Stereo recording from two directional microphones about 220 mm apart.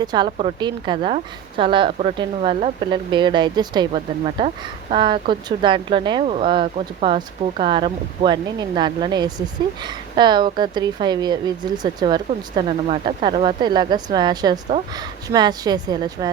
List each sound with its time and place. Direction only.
0.0 s a woman's voice: 20° right (ahead or behind)